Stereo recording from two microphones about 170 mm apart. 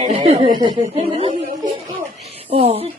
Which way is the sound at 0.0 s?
35° right (ahead or behind).